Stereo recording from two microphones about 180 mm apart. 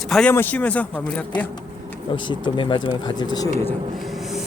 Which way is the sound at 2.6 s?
25° left (ahead or behind).